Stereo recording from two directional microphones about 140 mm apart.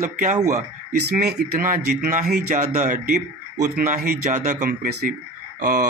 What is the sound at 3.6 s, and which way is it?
A man's voice, 70° right (ahead or behind).